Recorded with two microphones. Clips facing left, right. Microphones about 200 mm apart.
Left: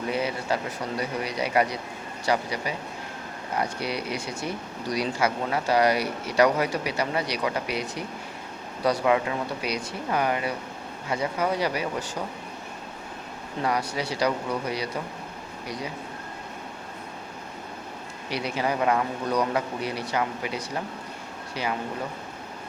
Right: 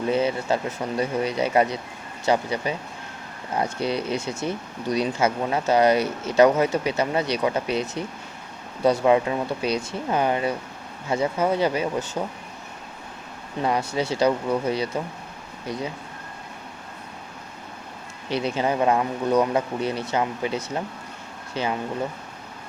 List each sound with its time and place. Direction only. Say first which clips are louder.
0.1 s speech: right 5 dB; 25° right (ahead or behind)
13.6 s speech: right 3 dB; 25° right (ahead or behind)
18.3 s speech: right 4 dB; 25° right (ahead or behind)